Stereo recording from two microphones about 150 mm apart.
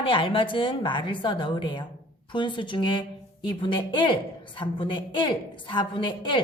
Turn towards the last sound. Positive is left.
turn(degrees=35)  # may be behind; listen again after turning